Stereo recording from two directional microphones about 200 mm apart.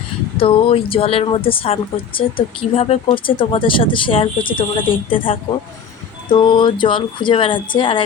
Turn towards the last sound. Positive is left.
turn(degrees=25)  # may be behind; listen again after turning